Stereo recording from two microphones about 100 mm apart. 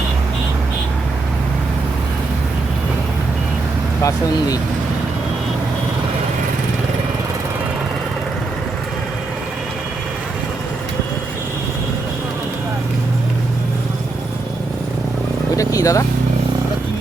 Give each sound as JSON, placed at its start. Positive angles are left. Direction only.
{"t": 4.0, "sound": "speech", "side_deg": 40}
{"t": 15.5, "sound": "vehicle", "side_deg": 35}